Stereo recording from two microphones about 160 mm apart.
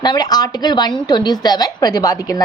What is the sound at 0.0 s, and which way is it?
A woman's voice, 25° left (ahead or behind).